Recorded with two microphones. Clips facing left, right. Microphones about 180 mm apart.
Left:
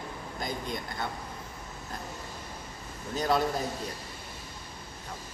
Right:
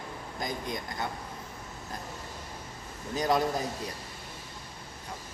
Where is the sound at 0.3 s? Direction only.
15° right (ahead or behind).